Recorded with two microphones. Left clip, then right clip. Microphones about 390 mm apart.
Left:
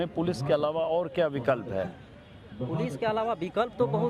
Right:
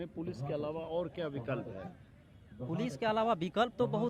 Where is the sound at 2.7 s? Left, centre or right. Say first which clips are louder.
Left 4 dB; right.